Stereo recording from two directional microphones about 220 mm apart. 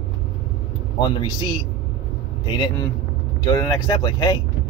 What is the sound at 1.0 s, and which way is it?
A man's voice, 20° left (ahead or behind).